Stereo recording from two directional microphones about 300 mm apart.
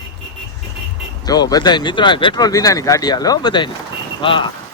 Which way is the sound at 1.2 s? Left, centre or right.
Centre.